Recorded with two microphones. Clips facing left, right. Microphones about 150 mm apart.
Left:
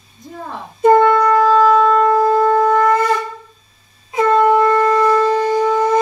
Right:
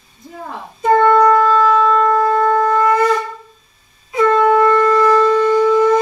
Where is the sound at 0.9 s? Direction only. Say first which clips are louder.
Right 4 dB; 5° left (ahead or behind).